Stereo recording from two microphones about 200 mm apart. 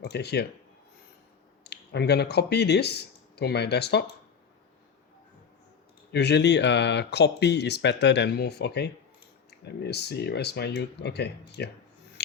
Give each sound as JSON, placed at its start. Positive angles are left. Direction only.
{"t": 0.0, "sound": "speech", "side_deg": 55}
{"t": 1.6, "sound": "speech", "side_deg": 55}
{"t": 6.1, "sound": "speech", "side_deg": 55}